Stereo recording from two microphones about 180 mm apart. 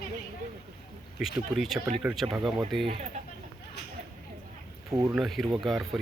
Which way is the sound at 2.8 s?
30° right (ahead or behind).